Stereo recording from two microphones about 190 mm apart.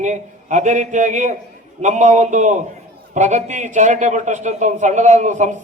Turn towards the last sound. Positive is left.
turn(degrees=-40)  # may be behind; listen again after turning